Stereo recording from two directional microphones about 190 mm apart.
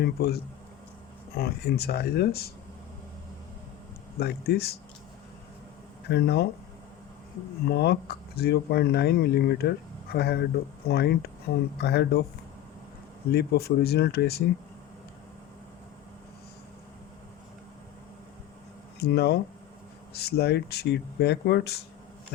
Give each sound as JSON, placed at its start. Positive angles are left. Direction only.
{"t": 0.0, "sound": "speech", "side_deg": 55}
{"t": 1.4, "sound": "speech", "side_deg": 55}
{"t": 4.2, "sound": "speech", "side_deg": 55}
{"t": 6.1, "sound": "speech", "side_deg": 60}
{"t": 7.7, "sound": "speech", "side_deg": 60}
{"t": 13.3, "sound": "speech", "side_deg": 55}
{"t": 18.9, "sound": "speech", "side_deg": 60}